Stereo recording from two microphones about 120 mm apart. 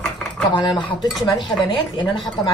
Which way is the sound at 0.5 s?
35° left (ahead or behind).